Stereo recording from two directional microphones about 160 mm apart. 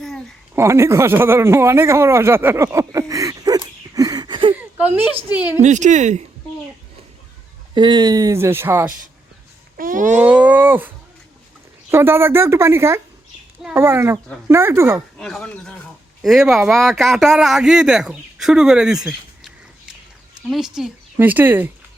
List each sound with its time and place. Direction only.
0.5 s speech: 15° right (ahead or behind)
4.5 s a sound: 10° right (ahead or behind)
5.3 s speech: 10° right (ahead or behind)
5.6 s speech: 50° right (ahead or behind)
7.7 s speech: 30° right (ahead or behind)
9.7 s speech: 60° right (ahead or behind)
10.2 s speech: 10° right (ahead or behind)
15.2 s speech: 5° left (ahead or behind); by 21.7 s 10° right (ahead or behind)